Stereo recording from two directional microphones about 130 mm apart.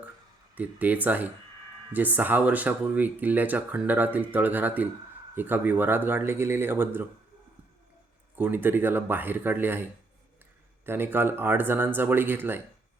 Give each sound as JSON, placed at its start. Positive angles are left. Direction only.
{"t": 0.5, "sound": "speech", "side_deg": -10}
{"t": 8.4, "sound": "speech", "side_deg": -15}
{"t": 10.8, "sound": "speech", "side_deg": -15}